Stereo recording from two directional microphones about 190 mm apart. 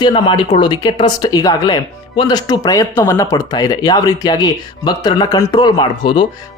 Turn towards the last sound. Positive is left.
turn(degrees=25)  # may be behind; listen again after turning